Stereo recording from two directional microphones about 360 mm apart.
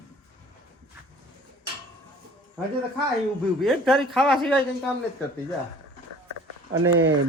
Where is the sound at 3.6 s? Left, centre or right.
Centre.